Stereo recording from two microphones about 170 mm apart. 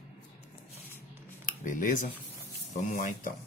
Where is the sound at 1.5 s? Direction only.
50° left (ahead or behind).